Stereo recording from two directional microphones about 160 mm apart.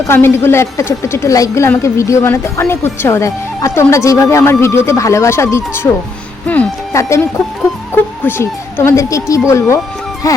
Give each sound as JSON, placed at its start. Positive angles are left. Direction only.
{"t": 0.1, "sound": "a woman's voice", "side_deg": 15}